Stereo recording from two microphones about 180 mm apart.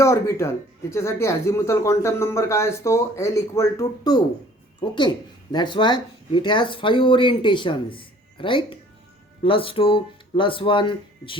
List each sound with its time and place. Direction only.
0.0 s speech: 15° left (ahead or behind)